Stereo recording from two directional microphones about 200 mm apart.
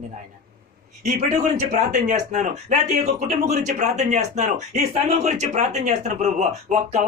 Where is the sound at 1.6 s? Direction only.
40° right (ahead or behind).